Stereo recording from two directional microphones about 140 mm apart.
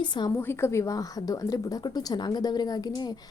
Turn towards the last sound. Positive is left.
turn(degrees=30)  # may be behind; listen again after turning